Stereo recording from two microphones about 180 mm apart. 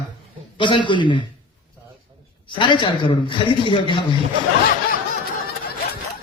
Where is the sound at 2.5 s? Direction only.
25° left (ahead or behind).